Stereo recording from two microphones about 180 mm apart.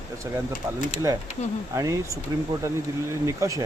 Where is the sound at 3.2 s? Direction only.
15° right (ahead or behind).